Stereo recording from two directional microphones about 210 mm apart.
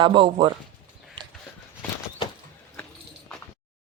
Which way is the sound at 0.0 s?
25° right (ahead or behind).